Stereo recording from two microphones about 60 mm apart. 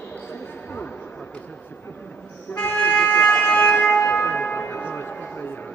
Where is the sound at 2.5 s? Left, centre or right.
Centre.